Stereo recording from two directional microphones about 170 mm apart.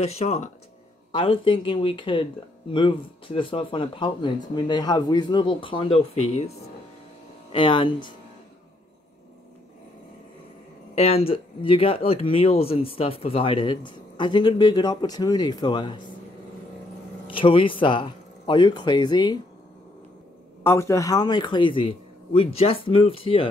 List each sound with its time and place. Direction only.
0.0 s speech: 40° left (ahead or behind)
7.5 s speech: 30° left (ahead or behind)
11.0 s speech: 35° left (ahead or behind)
17.3 s speech: 30° left (ahead or behind)
20.6 s speech: 15° left (ahead or behind); by 23.5 s 35° left (ahead or behind)